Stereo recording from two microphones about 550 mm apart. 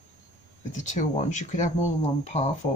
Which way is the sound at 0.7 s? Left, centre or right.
Centre.